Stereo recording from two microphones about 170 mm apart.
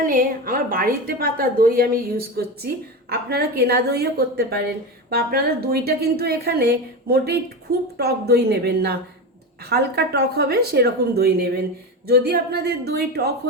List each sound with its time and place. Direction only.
0.0 s a woman's voice: 55° right (ahead or behind)